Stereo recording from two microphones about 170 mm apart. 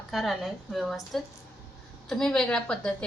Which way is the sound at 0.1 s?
Centre (ahead or behind).